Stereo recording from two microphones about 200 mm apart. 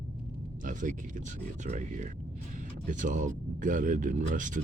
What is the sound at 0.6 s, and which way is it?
Speech, 40° right (ahead or behind).